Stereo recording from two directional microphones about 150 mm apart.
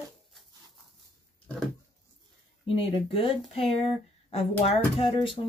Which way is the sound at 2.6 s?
35° left (ahead or behind).